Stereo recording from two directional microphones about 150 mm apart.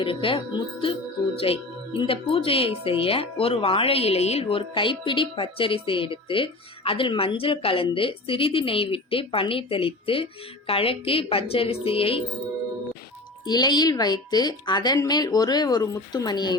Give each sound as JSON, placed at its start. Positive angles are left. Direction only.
{"t": 0.0, "sound": "speech", "side_deg": 35}
{"t": 13.4, "sound": "speech", "side_deg": 30}